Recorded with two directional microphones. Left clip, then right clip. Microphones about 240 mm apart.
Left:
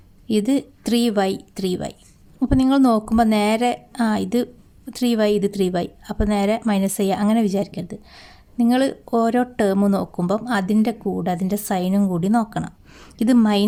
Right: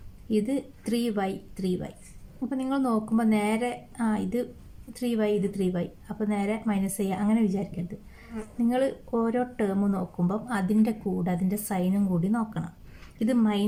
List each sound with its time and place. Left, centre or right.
0.3 s a woman's voice: left